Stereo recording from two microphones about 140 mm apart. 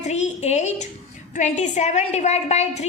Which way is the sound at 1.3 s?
60° left (ahead or behind).